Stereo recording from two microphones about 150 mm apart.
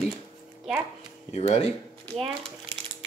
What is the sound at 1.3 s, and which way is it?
Speech, 45° left (ahead or behind).